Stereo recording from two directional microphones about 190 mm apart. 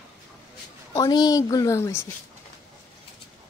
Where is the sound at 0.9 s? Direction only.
20° left (ahead or behind).